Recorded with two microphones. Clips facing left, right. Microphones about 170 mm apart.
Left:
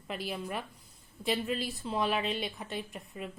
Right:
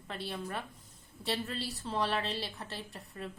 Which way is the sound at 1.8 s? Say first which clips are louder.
Left 1 dB; 5° left (ahead or behind).